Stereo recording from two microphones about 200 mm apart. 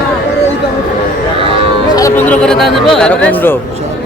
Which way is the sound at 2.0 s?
10° left (ahead or behind).